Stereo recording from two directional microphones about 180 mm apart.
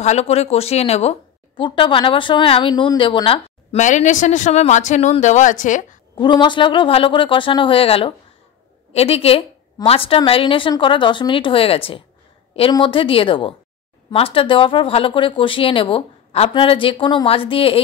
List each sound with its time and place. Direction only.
0.0 s a woman's voice: 35° left (ahead or behind)
6.1 s a woman's voice: 25° left (ahead or behind)